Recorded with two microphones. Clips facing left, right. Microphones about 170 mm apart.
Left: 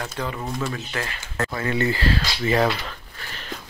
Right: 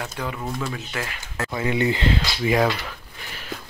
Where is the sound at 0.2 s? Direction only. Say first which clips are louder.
Left 1 dB; 10° right (ahead or behind).